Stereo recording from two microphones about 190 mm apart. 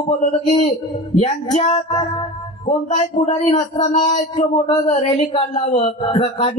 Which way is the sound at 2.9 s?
40° left (ahead or behind).